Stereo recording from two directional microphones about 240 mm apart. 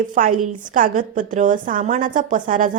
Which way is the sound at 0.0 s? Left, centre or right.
Right.